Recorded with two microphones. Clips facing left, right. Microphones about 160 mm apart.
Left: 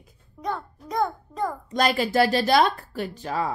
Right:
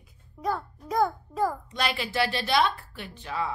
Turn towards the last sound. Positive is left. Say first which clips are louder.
# left 5 dB
turn(degrees=40)  # may be behind; listen again after turning